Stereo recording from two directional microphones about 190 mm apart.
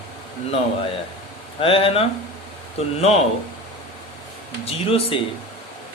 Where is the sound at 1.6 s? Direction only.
30° left (ahead or behind).